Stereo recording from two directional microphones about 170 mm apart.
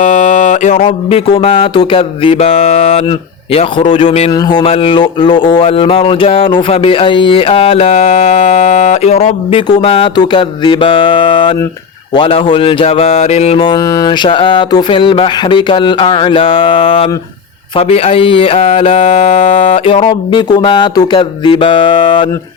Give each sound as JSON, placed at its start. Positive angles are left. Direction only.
{"t": 0.0, "sound": "mantra", "side_deg": 45}
{"t": 0.9, "sound": "speech", "side_deg": 35}
{"t": 4.3, "sound": "speech", "side_deg": 25}